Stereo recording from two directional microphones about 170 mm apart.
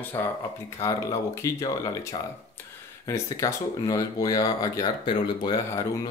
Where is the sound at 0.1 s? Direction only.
15° left (ahead or behind).